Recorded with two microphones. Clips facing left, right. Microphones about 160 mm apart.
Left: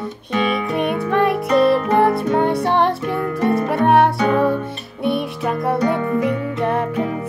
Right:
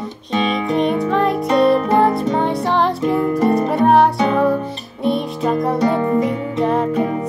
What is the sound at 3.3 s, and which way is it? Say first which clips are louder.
Music: left 1 dB; 25° right (ahead or behind).